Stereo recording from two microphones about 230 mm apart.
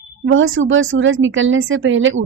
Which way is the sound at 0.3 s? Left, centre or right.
Right.